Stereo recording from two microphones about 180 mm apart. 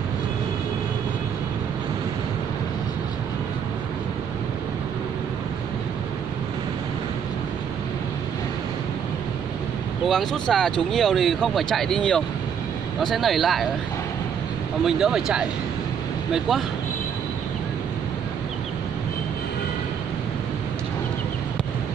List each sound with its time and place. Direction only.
10.0 s speech: 5° left (ahead or behind)
14.9 s speech: 5° right (ahead or behind)